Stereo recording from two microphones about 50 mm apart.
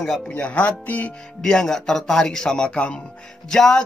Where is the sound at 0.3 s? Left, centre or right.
Left.